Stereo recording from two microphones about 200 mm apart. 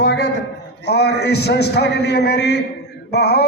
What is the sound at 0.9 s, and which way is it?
A man's voice, 55° left (ahead or behind).